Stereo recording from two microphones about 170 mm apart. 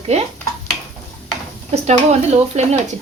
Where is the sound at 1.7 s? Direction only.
40° right (ahead or behind).